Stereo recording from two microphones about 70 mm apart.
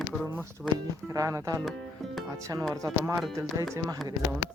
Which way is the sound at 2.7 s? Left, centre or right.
Right.